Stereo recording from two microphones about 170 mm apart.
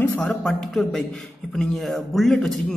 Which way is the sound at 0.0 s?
10° left (ahead or behind).